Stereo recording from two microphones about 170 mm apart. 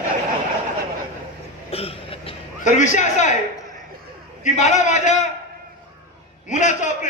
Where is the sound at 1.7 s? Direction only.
35° left (ahead or behind).